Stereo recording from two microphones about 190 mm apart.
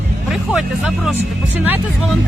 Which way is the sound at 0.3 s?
Centre (ahead or behind).